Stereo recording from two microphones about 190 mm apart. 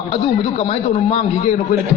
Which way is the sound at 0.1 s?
30° left (ahead or behind).